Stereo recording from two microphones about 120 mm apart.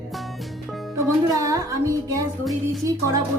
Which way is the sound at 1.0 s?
25° right (ahead or behind).